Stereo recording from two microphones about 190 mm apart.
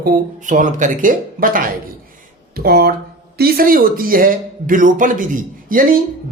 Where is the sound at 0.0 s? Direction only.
40° right (ahead or behind).